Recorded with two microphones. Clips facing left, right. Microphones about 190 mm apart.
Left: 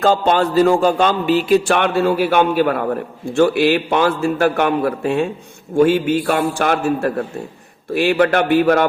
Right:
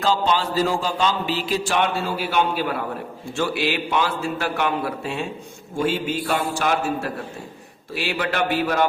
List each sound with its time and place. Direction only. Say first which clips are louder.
0.0 s a man's voice: left 6 dB; 55° left (ahead or behind)